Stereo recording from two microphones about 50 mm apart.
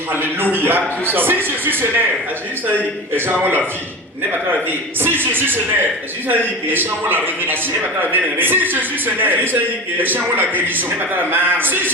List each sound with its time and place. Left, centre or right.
0.1 s a man's voice: right
4.9 s a man's voice: right